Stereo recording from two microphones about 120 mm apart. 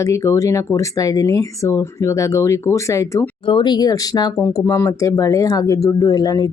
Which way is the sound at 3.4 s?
40° left (ahead or behind).